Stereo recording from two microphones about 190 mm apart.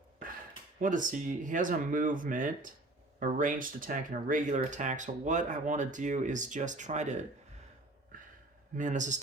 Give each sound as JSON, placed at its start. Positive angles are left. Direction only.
{"t": 0.8, "sound": "speech", "side_deg": -45}
{"t": 8.1, "sound": "a sound", "side_deg": -45}
{"t": 8.7, "sound": "speech", "side_deg": -40}